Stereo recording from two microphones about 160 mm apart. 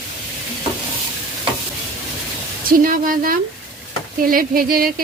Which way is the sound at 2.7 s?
60° right (ahead or behind).